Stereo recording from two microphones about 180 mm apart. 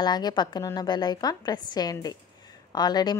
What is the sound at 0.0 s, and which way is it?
A woman's voice, 25° left (ahead or behind).